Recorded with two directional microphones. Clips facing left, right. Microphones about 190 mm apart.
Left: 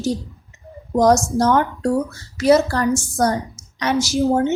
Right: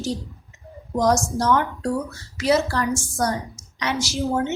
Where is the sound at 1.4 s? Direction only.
45° left (ahead or behind).